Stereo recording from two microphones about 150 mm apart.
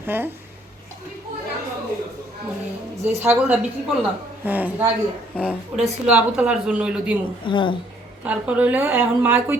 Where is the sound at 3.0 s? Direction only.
10° right (ahead or behind).